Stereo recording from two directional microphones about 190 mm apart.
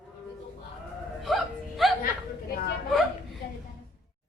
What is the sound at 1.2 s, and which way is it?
Whimper, centre (ahead or behind).